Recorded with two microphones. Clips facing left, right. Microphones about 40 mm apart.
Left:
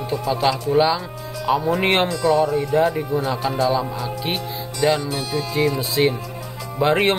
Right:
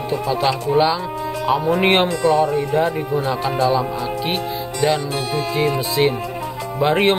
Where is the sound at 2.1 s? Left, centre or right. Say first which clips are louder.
Right 2 dB; right.